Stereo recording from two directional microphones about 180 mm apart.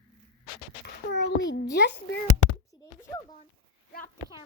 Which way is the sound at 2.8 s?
20° left (ahead or behind).